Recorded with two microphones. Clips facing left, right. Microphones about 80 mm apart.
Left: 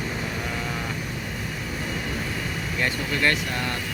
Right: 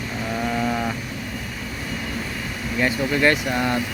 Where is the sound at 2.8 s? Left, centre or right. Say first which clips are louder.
Right 6 dB; centre.